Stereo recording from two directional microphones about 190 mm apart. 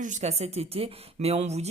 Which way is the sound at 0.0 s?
40° right (ahead or behind).